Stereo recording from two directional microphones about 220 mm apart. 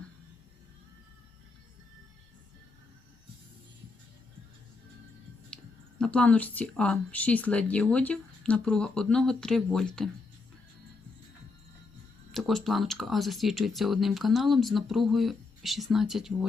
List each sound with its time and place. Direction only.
5.5 s clicking: 5° left (ahead or behind)
6.0 s speech: 5° left (ahead or behind)
12.3 s speech: centre (ahead or behind)